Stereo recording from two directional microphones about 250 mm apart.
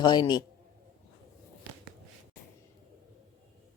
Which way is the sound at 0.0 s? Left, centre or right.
Centre.